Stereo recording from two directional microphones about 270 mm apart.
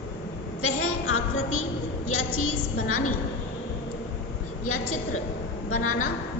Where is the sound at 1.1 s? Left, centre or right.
Left.